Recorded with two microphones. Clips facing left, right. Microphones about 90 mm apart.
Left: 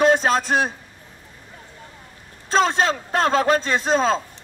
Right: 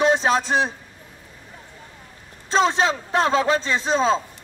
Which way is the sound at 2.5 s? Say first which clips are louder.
Even; 55° left (ahead or behind).